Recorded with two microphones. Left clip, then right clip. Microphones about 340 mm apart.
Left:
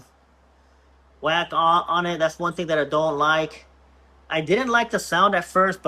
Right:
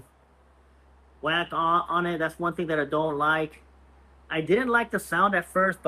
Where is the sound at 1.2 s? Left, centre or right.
Centre.